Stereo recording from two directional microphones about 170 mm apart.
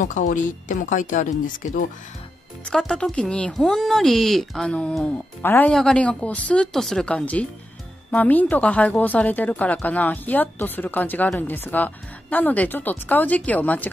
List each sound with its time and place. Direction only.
0.0 s speech: 50° left (ahead or behind)
2.7 s speech: 5° left (ahead or behind)